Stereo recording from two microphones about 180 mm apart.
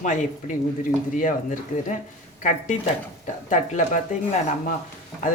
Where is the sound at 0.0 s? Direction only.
45° left (ahead or behind).